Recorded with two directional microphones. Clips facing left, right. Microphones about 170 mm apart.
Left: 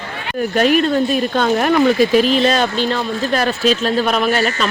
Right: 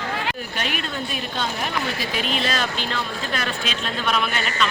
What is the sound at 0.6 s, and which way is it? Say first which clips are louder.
Speech: left 18 dB; 40° left (ahead or behind).